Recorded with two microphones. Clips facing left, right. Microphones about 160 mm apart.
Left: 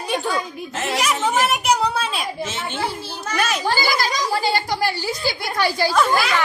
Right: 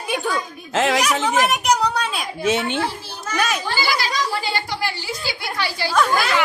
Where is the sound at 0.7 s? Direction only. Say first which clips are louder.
Right 8 dB; 90° right.